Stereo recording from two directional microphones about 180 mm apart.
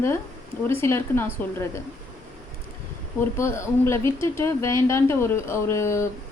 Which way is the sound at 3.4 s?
15° left (ahead or behind).